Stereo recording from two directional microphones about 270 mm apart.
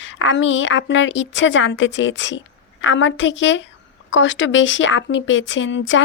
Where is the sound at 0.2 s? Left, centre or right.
Left.